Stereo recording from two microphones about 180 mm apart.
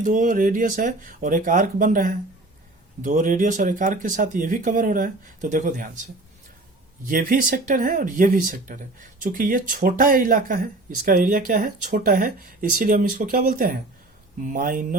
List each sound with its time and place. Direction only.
0.0 s speech: 45° right (ahead or behind)
7.1 s speech: 50° right (ahead or behind)